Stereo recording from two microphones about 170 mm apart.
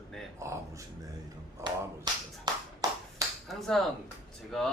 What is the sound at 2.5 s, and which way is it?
Clapping, 25° right (ahead or behind).